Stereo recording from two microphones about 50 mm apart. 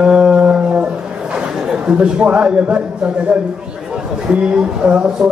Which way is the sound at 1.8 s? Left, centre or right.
Right.